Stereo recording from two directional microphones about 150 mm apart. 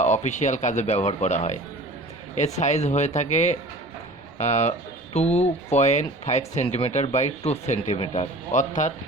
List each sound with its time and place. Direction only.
0.0 s speech: 50° left (ahead or behind)
8.5 s speech: 55° left (ahead or behind)